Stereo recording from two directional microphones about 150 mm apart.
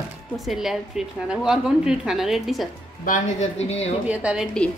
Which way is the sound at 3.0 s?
55° left (ahead or behind).